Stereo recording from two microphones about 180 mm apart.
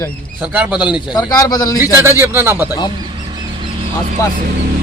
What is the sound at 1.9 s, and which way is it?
Speech, 15° right (ahead or behind).